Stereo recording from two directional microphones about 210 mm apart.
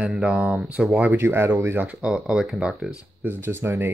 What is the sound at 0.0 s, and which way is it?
Speech, 5° right (ahead or behind).